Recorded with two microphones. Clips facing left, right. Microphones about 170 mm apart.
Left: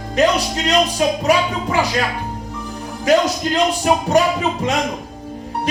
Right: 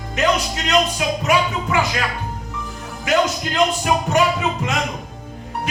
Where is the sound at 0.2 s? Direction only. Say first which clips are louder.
Left 4 dB; 35° left (ahead or behind).